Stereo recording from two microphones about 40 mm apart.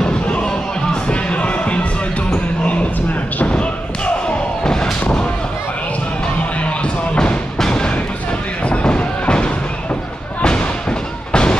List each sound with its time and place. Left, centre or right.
0.0 s music: left
2.3 s a sound: left
3.4 s thump: left
7.5 s music: centre
8.8 s music: left
10.4 s thump: left